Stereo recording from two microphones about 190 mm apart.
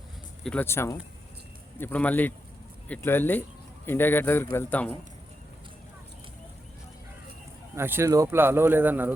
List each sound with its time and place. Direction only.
0.4 s speech: 10° left (ahead or behind)
7.8 s speech: 10° right (ahead or behind)